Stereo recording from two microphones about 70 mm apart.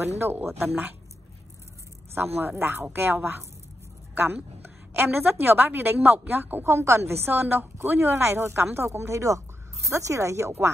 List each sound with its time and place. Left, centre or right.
0.0 s a woman's voice: right
2.1 s a woman's voice: right
6.7 s speech: right
7.2 s a woman's voice: right